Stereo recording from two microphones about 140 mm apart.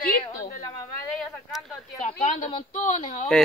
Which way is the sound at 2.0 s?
65° left (ahead or behind).